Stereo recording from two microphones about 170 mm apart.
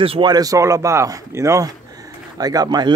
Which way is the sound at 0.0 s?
30° right (ahead or behind).